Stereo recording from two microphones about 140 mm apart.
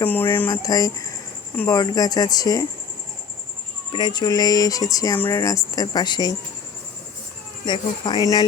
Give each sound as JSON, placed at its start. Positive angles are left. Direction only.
{"t": 0.0, "sound": "a sound", "side_deg": 15}
{"t": 0.5, "sound": "speech", "side_deg": 25}
{"t": 3.9, "sound": "speech", "side_deg": 30}
{"t": 7.6, "sound": "speech", "side_deg": 30}